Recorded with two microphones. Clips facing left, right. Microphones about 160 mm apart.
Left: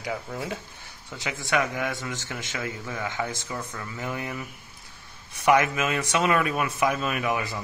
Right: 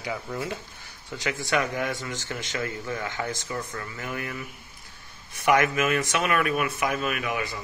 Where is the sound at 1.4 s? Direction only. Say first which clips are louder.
Left 1 dB; centre (ahead or behind).